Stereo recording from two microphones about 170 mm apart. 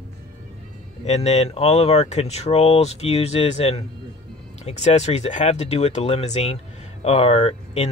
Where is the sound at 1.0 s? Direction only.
40° left (ahead or behind).